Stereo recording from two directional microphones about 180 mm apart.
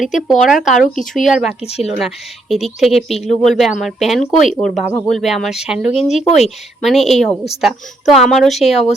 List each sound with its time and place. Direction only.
0.3 s speech: centre (ahead or behind)
1.6 s speech: 35° left (ahead or behind)
2.0 s speech: centre (ahead or behind)
6.1 s speech: 40° left (ahead or behind)
6.8 s speech: centre (ahead or behind)